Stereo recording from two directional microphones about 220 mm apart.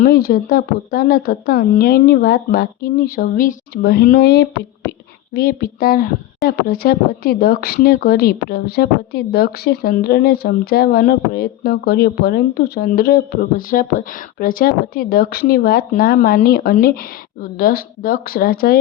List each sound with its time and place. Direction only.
0.0 s speech: 45° left (ahead or behind)